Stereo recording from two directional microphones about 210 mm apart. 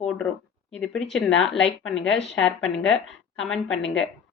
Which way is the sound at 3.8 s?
65° left (ahead or behind).